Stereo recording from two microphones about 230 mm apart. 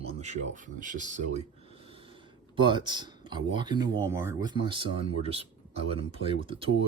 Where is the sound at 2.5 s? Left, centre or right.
Right.